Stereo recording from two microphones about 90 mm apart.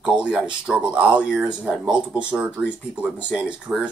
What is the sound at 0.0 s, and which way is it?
Speech, 10° right (ahead or behind).